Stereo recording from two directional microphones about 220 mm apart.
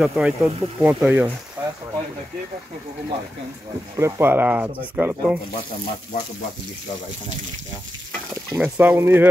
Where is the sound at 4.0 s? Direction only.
10° right (ahead or behind).